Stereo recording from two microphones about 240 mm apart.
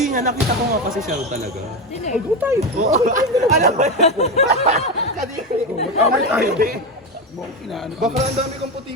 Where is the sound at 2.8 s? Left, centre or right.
Right.